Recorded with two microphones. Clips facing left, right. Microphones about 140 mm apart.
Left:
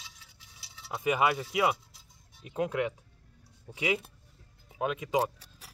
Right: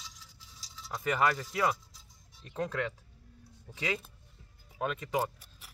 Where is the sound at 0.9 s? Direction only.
15° left (ahead or behind).